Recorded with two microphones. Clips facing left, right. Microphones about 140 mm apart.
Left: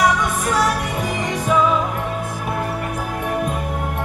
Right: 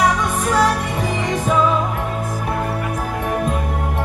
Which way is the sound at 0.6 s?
5° left (ahead or behind).